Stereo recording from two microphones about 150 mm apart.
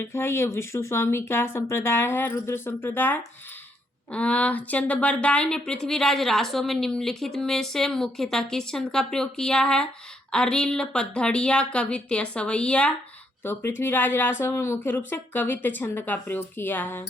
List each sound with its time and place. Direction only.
0.0 s a woman's voice: 15° left (ahead or behind)